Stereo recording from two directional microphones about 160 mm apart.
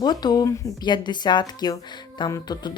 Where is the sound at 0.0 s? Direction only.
25° left (ahead or behind).